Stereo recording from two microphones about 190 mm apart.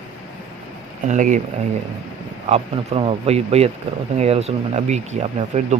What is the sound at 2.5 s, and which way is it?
Speech, 30° right (ahead or behind).